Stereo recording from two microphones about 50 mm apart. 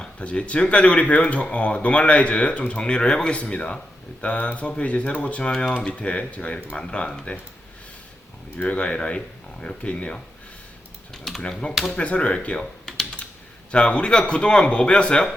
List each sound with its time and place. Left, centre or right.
0.0 s speech: left
8.6 s speech: left
11.1 s speech: centre
11.9 s speech: left
12.5 s computer keyboard: centre
13.7 s speech: left